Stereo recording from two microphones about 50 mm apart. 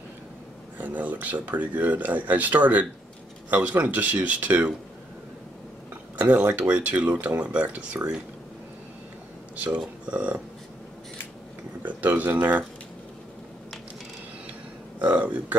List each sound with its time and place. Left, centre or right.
0.7 s speech: right
6.1 s speech: right
10.0 s speech: right
11.8 s speech: right
15.0 s a sound: right